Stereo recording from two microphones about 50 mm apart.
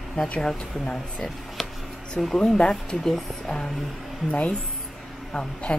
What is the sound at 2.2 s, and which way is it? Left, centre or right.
Speech, centre.